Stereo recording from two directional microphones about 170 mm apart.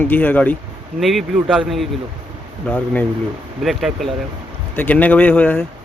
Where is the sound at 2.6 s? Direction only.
10° left (ahead or behind).